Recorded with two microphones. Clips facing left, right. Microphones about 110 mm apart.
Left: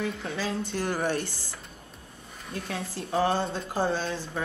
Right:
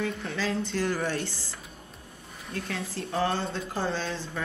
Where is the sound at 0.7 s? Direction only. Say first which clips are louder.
Right 2 dB; 25° left (ahead or behind).